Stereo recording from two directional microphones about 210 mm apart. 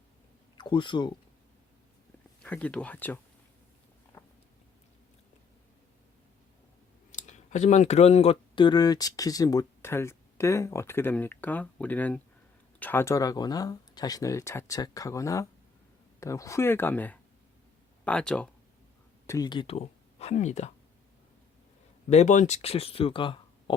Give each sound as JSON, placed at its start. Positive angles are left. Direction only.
{"t": 0.5, "sound": "speech", "side_deg": 20}
{"t": 2.4, "sound": "speech", "side_deg": 5}
{"t": 7.1, "sound": "speech", "side_deg": 35}
{"t": 19.3, "sound": "speech", "side_deg": 20}
{"t": 22.1, "sound": "speech", "side_deg": 35}